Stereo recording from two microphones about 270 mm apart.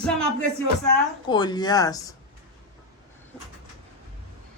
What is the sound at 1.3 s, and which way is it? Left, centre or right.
Speech, centre.